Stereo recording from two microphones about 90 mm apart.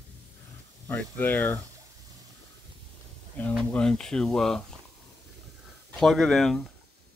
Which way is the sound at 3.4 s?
20° left (ahead or behind).